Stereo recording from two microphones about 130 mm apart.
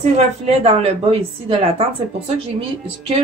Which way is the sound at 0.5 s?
50° right (ahead or behind).